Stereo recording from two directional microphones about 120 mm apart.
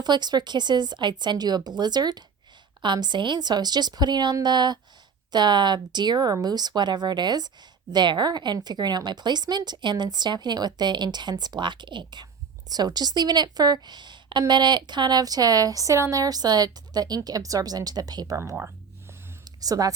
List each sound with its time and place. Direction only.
0.0 s speech: 35° right (ahead or behind)
19.5 s speech: 30° right (ahead or behind)